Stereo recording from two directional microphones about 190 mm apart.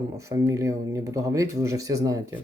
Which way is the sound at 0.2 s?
15° right (ahead or behind).